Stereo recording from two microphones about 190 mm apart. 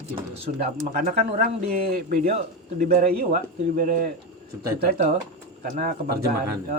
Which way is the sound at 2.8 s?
50° right (ahead or behind).